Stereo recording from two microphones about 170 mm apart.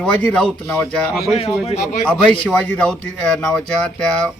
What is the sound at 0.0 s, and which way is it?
Speech, 5° left (ahead or behind).